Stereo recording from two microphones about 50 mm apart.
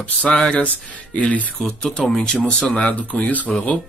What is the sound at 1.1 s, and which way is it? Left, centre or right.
Speech, left.